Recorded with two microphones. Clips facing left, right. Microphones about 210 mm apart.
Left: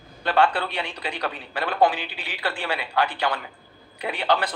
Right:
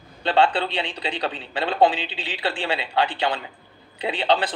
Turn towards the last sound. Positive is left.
turn(degrees=-25)  # may be behind; listen again after turning